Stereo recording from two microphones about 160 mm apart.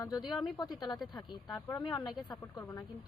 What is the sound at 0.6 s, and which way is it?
Speech, 25° left (ahead or behind).